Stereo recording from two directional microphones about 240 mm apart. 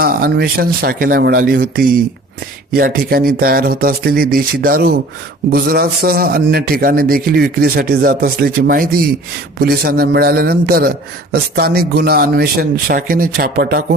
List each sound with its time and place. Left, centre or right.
0.0 s a man's voice: right